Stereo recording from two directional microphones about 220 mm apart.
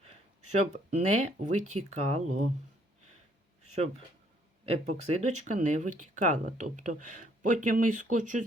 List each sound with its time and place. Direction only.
0.6 s speech: 30° right (ahead or behind)
4.6 s speech: 30° right (ahead or behind)